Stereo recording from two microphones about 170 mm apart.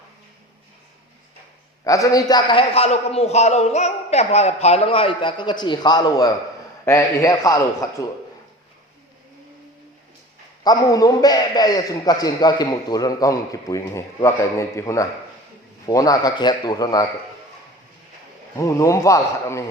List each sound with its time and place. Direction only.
1.8 s a man's voice: 20° left (ahead or behind)
10.6 s a man's voice: 20° left (ahead or behind)
18.5 s a man's voice: 20° left (ahead or behind)